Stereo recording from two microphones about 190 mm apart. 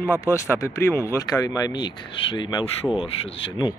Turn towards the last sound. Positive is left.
turn(degrees=25)  # may be behind; listen again after turning